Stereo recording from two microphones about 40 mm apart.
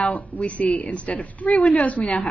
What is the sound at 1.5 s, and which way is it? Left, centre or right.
Speech, left.